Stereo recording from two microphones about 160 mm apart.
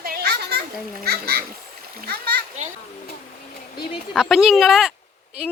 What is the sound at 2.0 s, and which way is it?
Speech, 90° right.